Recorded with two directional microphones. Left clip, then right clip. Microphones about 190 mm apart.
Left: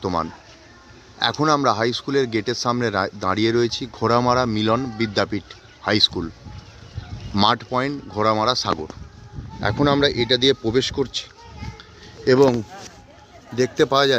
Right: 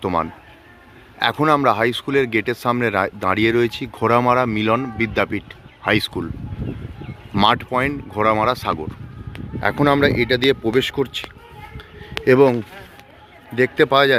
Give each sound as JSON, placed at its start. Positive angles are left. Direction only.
{"t": 0.0, "sound": "speech", "side_deg": 0}
{"t": 7.3, "sound": "speech", "side_deg": 0}
{"t": 12.2, "sound": "speech", "side_deg": -5}
{"t": 13.6, "sound": "speech", "side_deg": 0}